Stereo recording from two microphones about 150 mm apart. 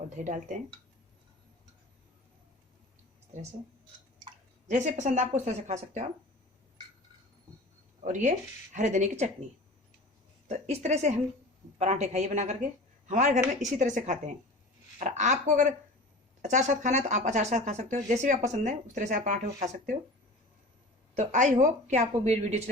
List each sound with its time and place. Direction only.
0.3 s speech: 55° right (ahead or behind)
3.3 s speech: 55° right (ahead or behind)
4.7 s a woman's voice: 55° right (ahead or behind)
8.0 s speech: 55° right (ahead or behind)
10.5 s a woman's voice: 50° right (ahead or behind)
21.2 s a woman's voice: 55° right (ahead or behind)